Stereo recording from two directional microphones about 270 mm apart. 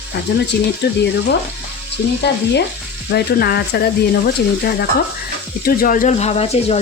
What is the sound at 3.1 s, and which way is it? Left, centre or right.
Speech, left.